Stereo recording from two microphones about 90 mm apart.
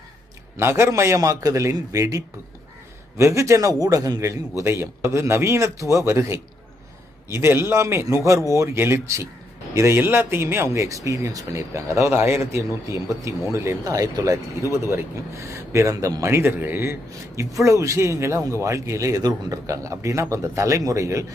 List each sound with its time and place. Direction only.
0.5 s a man's voice: 30° right (ahead or behind)